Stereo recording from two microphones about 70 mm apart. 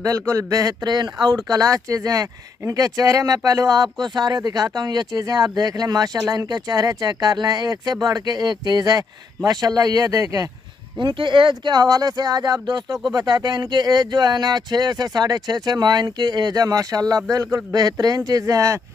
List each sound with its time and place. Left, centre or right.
0.3 s speech: right
11.6 s speech: right